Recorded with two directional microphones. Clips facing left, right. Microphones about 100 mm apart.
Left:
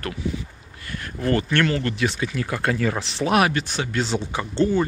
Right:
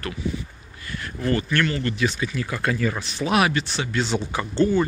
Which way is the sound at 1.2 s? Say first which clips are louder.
Left 2 dB; 65° left (ahead or behind).